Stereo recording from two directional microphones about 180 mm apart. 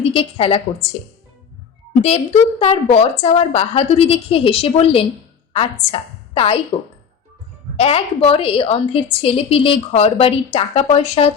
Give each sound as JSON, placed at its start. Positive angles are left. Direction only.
{"t": 0.0, "sound": "a woman's voice", "side_deg": 30}
{"t": 1.9, "sound": "a woman's voice", "side_deg": 35}
{"t": 7.8, "sound": "a woman's voice", "side_deg": 35}